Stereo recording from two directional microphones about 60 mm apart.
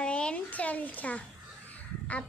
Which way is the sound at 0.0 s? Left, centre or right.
Centre.